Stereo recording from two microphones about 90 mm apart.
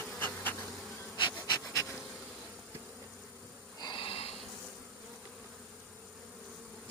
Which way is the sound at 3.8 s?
50° left (ahead or behind).